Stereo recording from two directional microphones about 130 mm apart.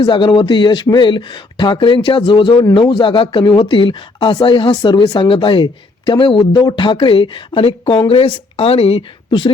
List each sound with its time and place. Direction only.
0.0 s speech: 40° left (ahead or behind)